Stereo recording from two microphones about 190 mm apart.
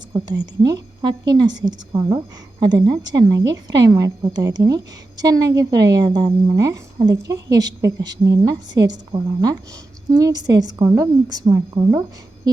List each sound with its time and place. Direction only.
0.1 s a woman's voice: 20° right (ahead or behind)